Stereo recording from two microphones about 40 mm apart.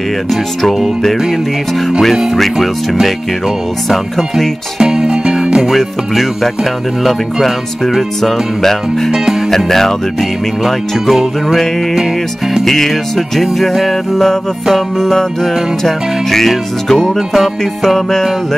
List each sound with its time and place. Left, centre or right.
0.3 s music: centre
2.3 s music: centre
4.7 s music: centre
5.7 s music: centre
8.2 s music: centre
10.6 s music: centre
12.6 s music: centre